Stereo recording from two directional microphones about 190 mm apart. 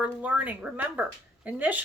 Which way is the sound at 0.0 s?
5° right (ahead or behind).